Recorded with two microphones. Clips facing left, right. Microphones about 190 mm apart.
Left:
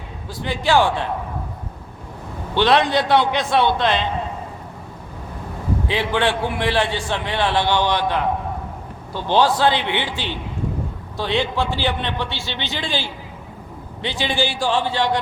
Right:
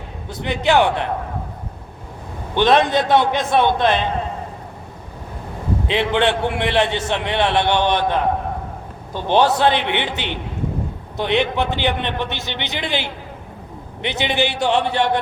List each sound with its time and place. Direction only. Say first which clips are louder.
0.3 s a man's voice: right 2 dB; 20° right (ahead or behind)
2.6 s a man's voice: right 2 dB; 15° right (ahead or behind)
5.9 s a man's voice: right 3 dB; 20° right (ahead or behind)